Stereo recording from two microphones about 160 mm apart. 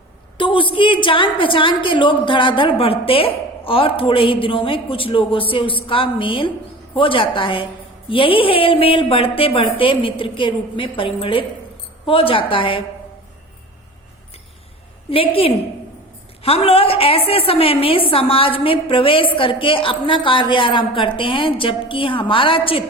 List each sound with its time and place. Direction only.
0.3 s a woman's voice: 35° left (ahead or behind)
15.1 s a woman's voice: 35° left (ahead or behind)